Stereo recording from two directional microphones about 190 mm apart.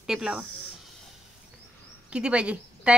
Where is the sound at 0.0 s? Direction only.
5° right (ahead or behind).